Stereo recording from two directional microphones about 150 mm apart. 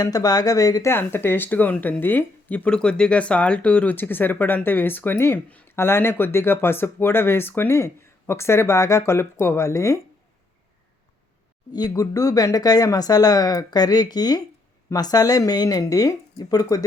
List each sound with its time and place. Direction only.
0.0 s speech: 25° left (ahead or behind)
11.7 s speech: 25° left (ahead or behind)